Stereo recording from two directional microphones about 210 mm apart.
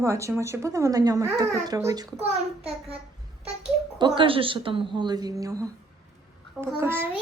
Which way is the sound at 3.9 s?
25° right (ahead or behind).